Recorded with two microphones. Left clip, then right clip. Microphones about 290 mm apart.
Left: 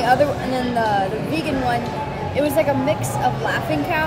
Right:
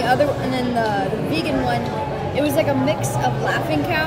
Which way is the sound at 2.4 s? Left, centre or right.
Centre.